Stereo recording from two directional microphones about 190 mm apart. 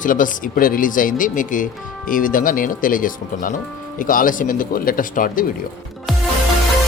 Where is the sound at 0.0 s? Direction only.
45° left (ahead or behind).